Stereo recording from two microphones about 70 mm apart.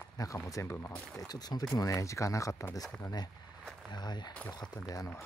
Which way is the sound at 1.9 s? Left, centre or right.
Left.